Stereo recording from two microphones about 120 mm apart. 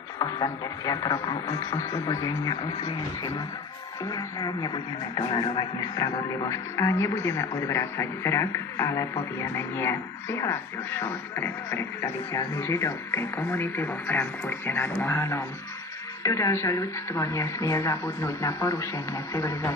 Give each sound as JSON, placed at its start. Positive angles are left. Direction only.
{"t": 0.2, "sound": "speech", "side_deg": 30}
{"t": 4.1, "sound": "speech", "side_deg": 35}
{"t": 5.1, "sound": "music", "side_deg": 45}
{"t": 6.5, "sound": "speech", "side_deg": 25}